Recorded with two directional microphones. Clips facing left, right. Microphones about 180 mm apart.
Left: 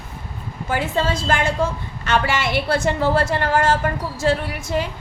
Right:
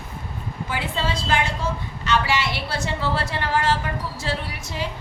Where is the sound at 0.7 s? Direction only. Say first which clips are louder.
Left 6 dB; 45° left (ahead or behind).